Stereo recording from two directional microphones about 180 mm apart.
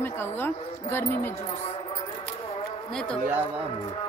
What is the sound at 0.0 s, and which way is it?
Speech, 10° left (ahead or behind).